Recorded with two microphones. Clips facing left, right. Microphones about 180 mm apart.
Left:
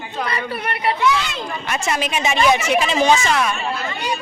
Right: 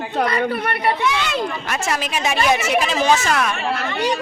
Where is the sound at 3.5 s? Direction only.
80° right.